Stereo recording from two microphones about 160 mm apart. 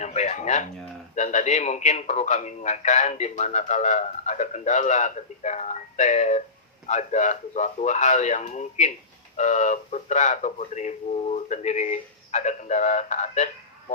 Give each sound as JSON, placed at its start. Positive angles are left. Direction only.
{"t": 0.0, "sound": "speech", "side_deg": 45}